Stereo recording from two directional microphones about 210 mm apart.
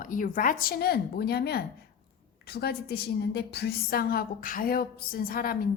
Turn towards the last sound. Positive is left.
turn(degrees=45)  # may be behind; listen again after turning